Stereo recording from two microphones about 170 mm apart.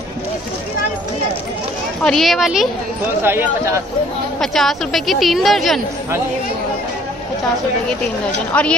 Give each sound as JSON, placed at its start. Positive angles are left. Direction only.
{"t": 2.0, "sound": "a woman's voice", "side_deg": 0}
{"t": 3.2, "sound": "a man's voice", "side_deg": -15}
{"t": 4.4, "sound": "a woman's voice", "side_deg": 0}
{"t": 8.5, "sound": "a woman's voice", "side_deg": 5}